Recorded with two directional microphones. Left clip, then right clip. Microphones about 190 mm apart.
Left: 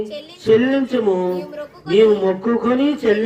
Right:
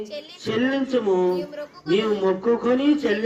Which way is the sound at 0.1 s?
15° right (ahead or behind).